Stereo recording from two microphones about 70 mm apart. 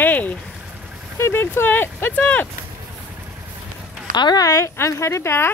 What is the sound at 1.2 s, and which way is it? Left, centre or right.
Speech, left.